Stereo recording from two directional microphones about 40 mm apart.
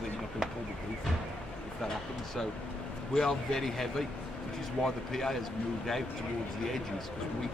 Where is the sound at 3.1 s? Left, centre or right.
Centre.